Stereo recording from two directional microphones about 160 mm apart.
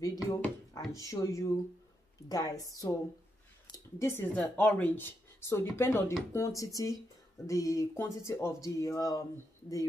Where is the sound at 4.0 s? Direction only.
15° left (ahead or behind).